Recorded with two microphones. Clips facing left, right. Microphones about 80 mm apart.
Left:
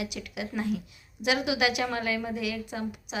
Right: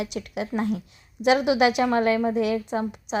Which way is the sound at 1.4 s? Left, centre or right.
Right.